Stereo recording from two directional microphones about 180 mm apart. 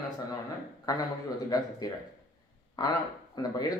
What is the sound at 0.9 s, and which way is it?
Speech, 20° left (ahead or behind).